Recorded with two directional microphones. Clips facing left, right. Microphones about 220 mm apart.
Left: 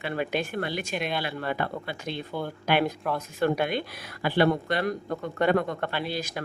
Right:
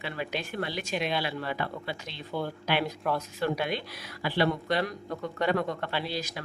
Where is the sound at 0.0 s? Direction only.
50° left (ahead or behind).